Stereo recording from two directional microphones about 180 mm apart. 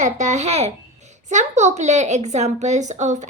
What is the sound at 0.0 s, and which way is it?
A woman's voice, 40° right (ahead or behind).